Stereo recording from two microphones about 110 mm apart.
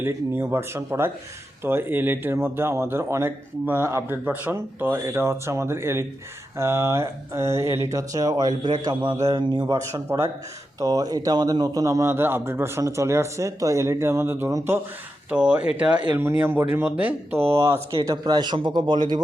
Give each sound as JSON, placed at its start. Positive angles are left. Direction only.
{"t": 0.0, "sound": "a man's voice", "side_deg": -20}
{"t": 15.3, "sound": "a man's voice", "side_deg": -15}
{"t": 18.0, "sound": "speech", "side_deg": -35}